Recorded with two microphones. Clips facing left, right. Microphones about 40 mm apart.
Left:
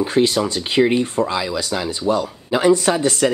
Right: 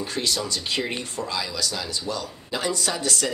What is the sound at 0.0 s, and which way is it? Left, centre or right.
Speech, left.